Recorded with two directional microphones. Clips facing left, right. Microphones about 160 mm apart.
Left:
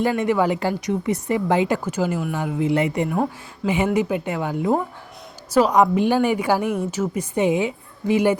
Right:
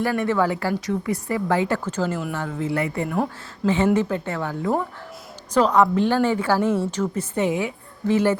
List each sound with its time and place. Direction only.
0.0 s speech: 20° left (ahead or behind)
3.1 s speech: centre (ahead or behind)
3.9 s speech: 15° left (ahead or behind)